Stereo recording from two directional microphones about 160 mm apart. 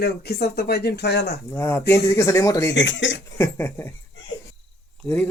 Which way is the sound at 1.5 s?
15° left (ahead or behind).